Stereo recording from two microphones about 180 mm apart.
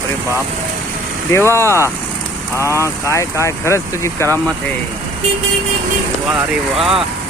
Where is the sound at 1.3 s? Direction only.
15° left (ahead or behind).